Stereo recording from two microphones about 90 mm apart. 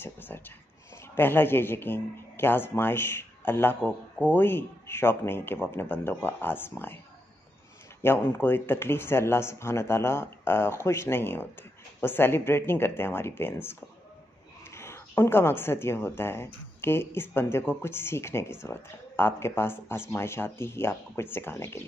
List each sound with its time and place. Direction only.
0.0 s speech: 25° left (ahead or behind)
8.0 s speech: 25° left (ahead or behind)